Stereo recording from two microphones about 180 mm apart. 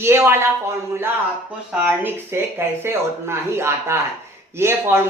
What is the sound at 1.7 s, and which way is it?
A woman's voice, 10° right (ahead or behind).